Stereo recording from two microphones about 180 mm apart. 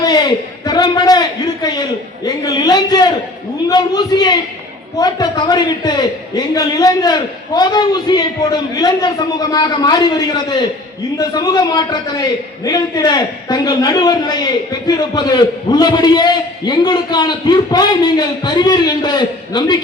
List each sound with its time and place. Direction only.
0.0 s a man's voice: 25° left (ahead or behind)